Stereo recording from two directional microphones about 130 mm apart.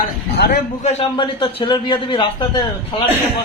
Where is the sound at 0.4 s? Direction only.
70° left (ahead or behind).